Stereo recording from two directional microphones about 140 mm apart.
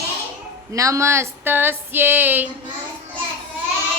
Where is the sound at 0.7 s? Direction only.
20° right (ahead or behind).